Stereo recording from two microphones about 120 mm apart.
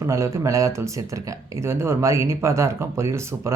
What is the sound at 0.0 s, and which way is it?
Speech, 25° right (ahead or behind).